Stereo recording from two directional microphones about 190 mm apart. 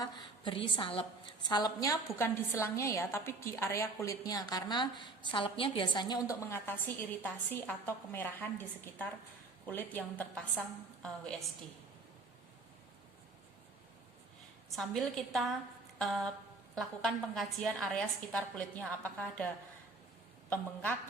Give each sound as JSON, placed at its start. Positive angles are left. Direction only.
{"t": 0.0, "sound": "a woman's voice", "side_deg": 25}
{"t": 14.8, "sound": "a woman's voice", "side_deg": 0}